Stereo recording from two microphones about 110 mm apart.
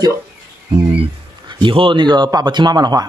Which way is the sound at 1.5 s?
50° right (ahead or behind).